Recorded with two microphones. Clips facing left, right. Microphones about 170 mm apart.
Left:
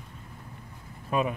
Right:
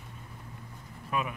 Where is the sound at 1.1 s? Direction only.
30° left (ahead or behind).